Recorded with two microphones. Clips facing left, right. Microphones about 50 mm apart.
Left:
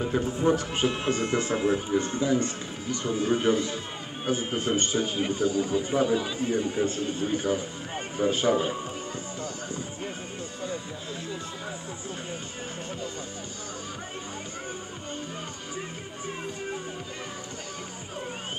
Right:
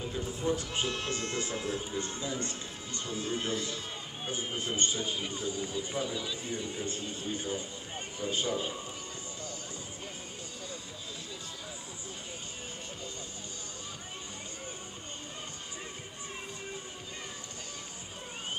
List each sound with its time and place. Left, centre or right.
0.1 s a man's voice: left
0.8 s speech: centre
1.6 s a man's voice: left
9.4 s music: left